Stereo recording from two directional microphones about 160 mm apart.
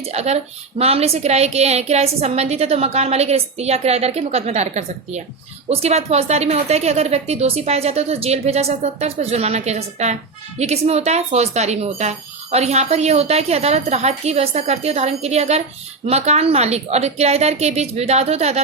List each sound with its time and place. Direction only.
0.0 s speech: 40° right (ahead or behind)